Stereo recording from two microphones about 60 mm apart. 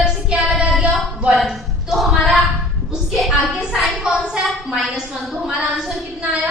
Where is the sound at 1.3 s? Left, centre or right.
Centre.